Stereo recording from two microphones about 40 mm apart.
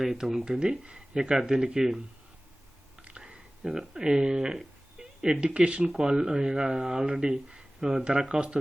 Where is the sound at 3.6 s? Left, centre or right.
Centre.